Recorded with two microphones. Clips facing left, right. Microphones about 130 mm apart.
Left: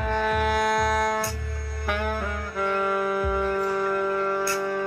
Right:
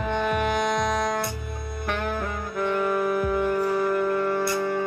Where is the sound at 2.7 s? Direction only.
5° right (ahead or behind).